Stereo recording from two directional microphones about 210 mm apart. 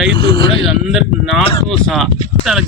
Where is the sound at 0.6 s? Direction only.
Centre (ahead or behind).